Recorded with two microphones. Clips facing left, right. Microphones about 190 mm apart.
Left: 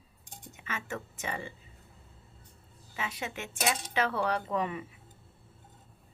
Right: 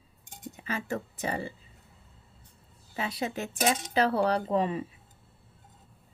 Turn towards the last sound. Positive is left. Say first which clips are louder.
# right 5 dB
turn(degrees=-30)  # may be behind; listen again after turning